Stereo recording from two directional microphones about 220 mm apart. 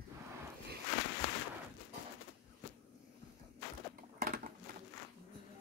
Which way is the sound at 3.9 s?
40° right (ahead or behind).